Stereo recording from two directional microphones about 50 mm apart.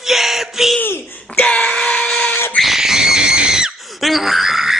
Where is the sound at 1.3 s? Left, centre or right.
Left.